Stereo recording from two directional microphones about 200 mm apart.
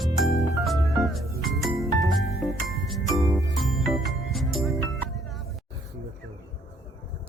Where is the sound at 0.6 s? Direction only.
Centre (ahead or behind).